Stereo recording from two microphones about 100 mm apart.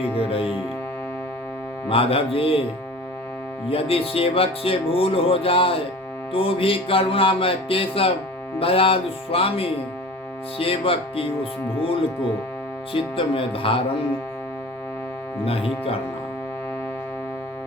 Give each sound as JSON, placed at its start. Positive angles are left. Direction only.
{"t": 0.2, "sound": "speech", "side_deg": 70}
{"t": 1.9, "sound": "speech", "side_deg": 70}
{"t": 3.7, "sound": "speech", "side_deg": 70}
{"t": 6.3, "sound": "music", "side_deg": 65}
{"t": 8.5, "sound": "speech", "side_deg": 65}
{"t": 12.9, "sound": "music", "side_deg": 65}
{"t": 15.4, "sound": "speech", "side_deg": 75}